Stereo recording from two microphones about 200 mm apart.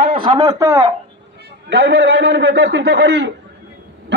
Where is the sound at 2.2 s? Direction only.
55° right (ahead or behind).